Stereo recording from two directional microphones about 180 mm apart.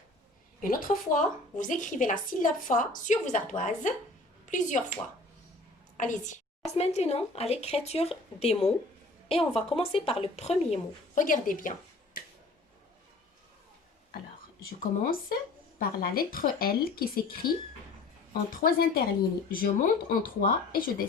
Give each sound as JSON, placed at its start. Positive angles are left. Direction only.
{"t": 0.6, "sound": "a woman's voice", "side_deg": 50}
{"t": 6.0, "sound": "a woman's voice", "side_deg": 45}
{"t": 14.6, "sound": "speech", "side_deg": 55}
{"t": 18.5, "sound": "a woman's voice", "side_deg": 55}